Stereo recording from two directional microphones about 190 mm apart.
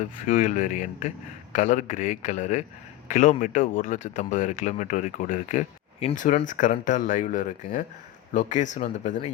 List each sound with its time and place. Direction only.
0.0 s speech: 40° left (ahead or behind)